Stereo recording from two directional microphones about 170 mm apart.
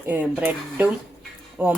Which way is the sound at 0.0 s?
10° right (ahead or behind).